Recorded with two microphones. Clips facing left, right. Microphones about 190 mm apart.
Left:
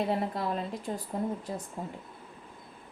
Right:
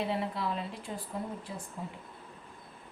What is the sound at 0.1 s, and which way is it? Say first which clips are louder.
Speech: left 3 dB; 45° left (ahead or behind).